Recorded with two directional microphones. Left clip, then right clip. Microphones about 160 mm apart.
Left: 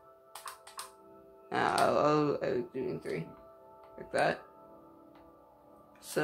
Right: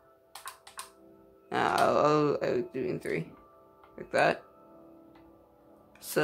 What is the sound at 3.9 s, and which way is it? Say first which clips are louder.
Speech: right 4 dB; 30° right (ahead or behind).